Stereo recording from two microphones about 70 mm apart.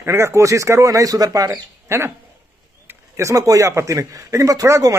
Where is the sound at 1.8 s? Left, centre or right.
Right.